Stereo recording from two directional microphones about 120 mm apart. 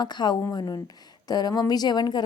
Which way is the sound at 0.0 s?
35° left (ahead or behind).